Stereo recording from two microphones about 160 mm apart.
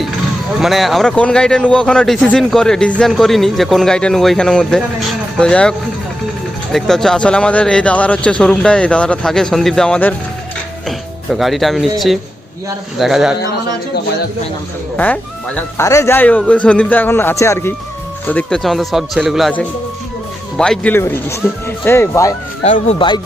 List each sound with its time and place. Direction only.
0.6 s a man's voice: centre (ahead or behind)
6.7 s a man's voice: centre (ahead or behind)
14.9 s a man's voice: 10° left (ahead or behind)
15.8 s a man's voice: 20° left (ahead or behind); by 19.5 s centre (ahead or behind)
20.6 s a man's voice: 5° left (ahead or behind)
22.6 s speech: 50° left (ahead or behind)
23.0 s speech: 30° left (ahead or behind)